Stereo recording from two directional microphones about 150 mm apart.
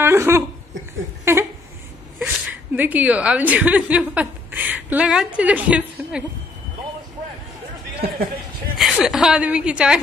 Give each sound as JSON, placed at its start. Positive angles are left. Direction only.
{"t": 0.0, "sound": "speech", "side_deg": -15}
{"t": 1.3, "sound": "a sound", "side_deg": -15}
{"t": 2.1, "sound": "a woman's voice", "side_deg": -10}
{"t": 8.7, "sound": "a woman's voice", "side_deg": 0}